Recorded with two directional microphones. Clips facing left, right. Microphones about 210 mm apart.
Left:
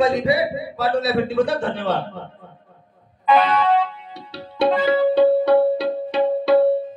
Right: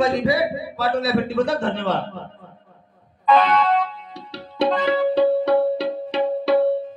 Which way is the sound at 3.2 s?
15° left (ahead or behind).